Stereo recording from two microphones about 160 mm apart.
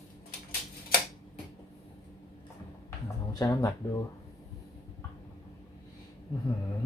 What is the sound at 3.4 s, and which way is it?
Speech, 20° left (ahead or behind).